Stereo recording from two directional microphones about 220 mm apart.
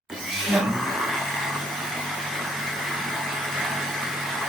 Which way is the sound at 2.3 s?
Centre (ahead or behind).